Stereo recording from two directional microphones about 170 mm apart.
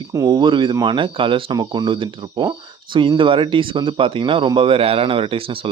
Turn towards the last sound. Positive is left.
turn(degrees=-30)  # may be behind; listen again after turning